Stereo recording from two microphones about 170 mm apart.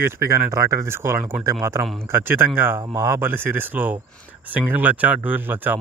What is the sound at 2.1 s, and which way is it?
Speech, 15° right (ahead or behind).